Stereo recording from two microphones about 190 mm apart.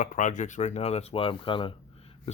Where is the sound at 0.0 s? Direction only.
45° left (ahead or behind).